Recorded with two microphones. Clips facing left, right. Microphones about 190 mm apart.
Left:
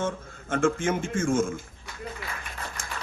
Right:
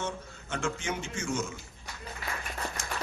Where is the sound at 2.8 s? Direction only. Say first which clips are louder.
Right 1 dB; 50° left (ahead or behind).